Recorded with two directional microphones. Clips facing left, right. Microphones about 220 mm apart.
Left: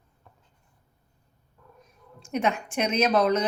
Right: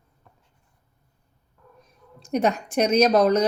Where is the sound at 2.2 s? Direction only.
40° right (ahead or behind).